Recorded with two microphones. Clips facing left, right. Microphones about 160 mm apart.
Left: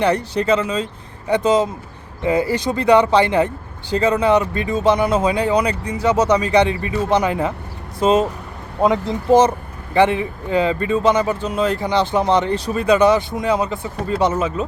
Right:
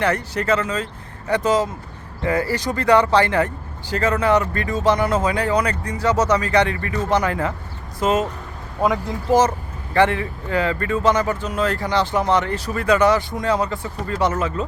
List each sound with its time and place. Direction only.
0.0 s speech: 15° left (ahead or behind)